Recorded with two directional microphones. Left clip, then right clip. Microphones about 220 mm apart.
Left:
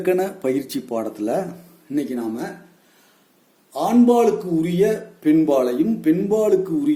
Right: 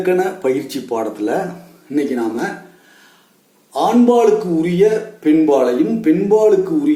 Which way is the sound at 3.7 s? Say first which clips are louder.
Right 4 dB; 50° left (ahead or behind).